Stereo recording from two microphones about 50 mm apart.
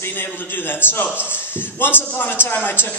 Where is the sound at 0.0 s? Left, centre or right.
Left.